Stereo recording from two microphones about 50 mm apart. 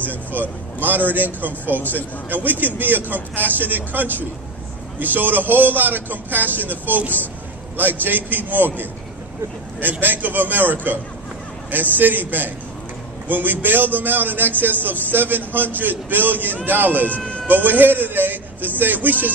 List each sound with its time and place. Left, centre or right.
0.0 s speech: right